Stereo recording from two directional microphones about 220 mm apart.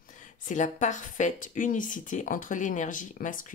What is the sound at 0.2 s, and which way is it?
A woman's voice, 35° left (ahead or behind).